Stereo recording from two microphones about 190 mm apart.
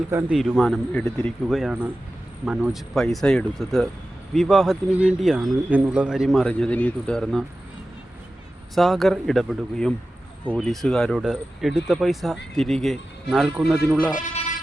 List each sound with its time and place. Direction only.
0.1 s speech: 15° right (ahead or behind)
0.3 s speech: centre (ahead or behind)
8.7 s speech: centre (ahead or behind)